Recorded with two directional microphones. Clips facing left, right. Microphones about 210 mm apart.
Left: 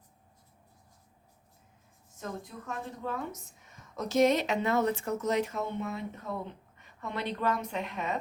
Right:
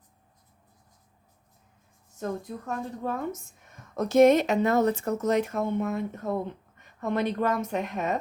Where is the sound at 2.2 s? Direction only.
45° right (ahead or behind).